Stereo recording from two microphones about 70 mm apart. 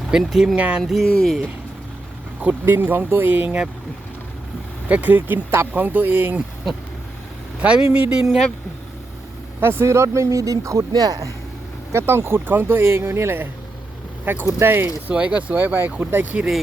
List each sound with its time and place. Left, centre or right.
0.1 s speech: centre
0.5 s speech: centre
0.8 s speech: centre
2.4 s speech: right
4.9 s speech: right
7.6 s speech: centre
9.6 s speech: right
10.9 s speech: right
11.9 s speech: right
15.1 s speech: centre